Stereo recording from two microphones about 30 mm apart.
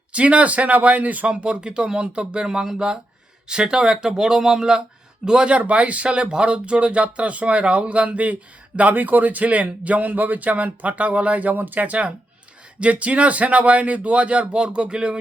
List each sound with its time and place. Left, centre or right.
0.1 s speech: right
1.4 s speech: right
5.5 s speech: right
6.1 s speech: right
9.0 s speech: right